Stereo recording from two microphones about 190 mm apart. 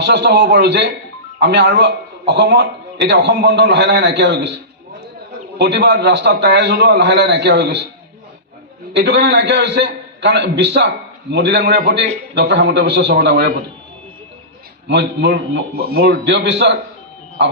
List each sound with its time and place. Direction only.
0.0 s a man's voice: 60° right (ahead or behind)
5.5 s a man's voice: 65° right (ahead or behind)
8.9 s a man's voice: 65° right (ahead or behind)
14.8 s a man's voice: 65° right (ahead or behind)